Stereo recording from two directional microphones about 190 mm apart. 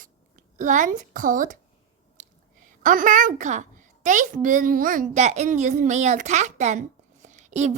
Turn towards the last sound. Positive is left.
turn(degrees=-40)  # may be behind; listen again after turning